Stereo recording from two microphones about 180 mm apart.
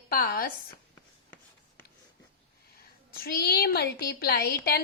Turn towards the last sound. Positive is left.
turn(degrees=60)  # may be behind; listen again after turning